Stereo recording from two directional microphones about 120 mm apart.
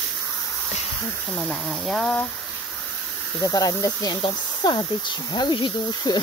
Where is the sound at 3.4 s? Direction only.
30° left (ahead or behind).